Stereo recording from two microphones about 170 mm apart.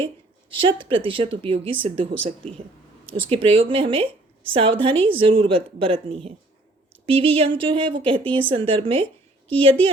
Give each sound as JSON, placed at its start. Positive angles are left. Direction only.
{"t": 0.5, "sound": "a woman's voice", "side_deg": -30}